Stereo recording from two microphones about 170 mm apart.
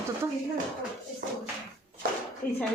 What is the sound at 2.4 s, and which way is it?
Speech, 15° left (ahead or behind).